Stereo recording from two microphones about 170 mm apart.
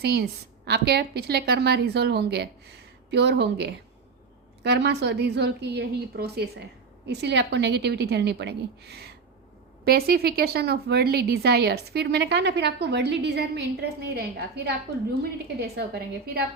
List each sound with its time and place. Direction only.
0.0 s a woman's voice: 75° right (ahead or behind)
7.1 s a woman's voice: 90° right; by 16.5 s 65° right (ahead or behind)